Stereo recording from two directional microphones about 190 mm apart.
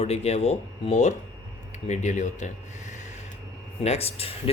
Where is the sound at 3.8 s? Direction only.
30° left (ahead or behind).